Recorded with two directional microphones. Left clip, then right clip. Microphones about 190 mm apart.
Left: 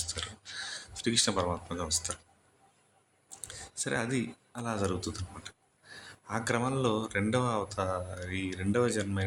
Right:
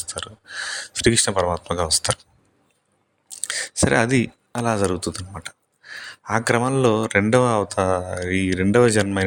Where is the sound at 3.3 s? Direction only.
50° right (ahead or behind).